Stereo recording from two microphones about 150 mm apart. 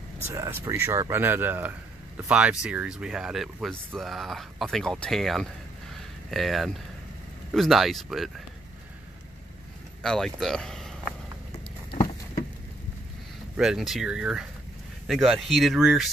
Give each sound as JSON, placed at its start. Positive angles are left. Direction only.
{"t": 0.3, "sound": "speech", "side_deg": -20}
{"t": 10.0, "sound": "speech", "side_deg": 5}
{"t": 13.6, "sound": "speech", "side_deg": 0}